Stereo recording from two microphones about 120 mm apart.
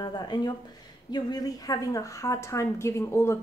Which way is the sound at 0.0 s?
35° left (ahead or behind).